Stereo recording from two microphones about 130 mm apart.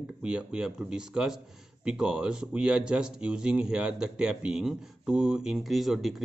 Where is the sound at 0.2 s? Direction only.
10° right (ahead or behind).